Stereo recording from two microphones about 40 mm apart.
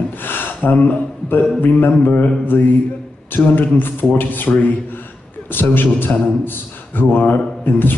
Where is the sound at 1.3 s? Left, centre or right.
Left.